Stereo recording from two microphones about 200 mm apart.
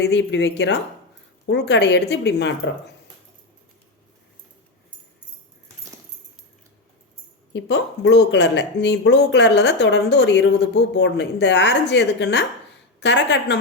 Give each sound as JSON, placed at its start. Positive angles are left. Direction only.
{"t": 0.0, "sound": "speech", "side_deg": 60}
{"t": 7.5, "sound": "speech", "side_deg": 60}